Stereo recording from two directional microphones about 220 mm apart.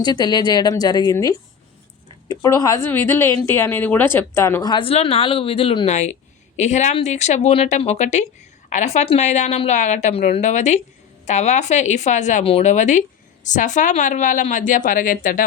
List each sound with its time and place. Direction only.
0.0 s a woman's voice: 20° left (ahead or behind); by 15.4 s 40° left (ahead or behind)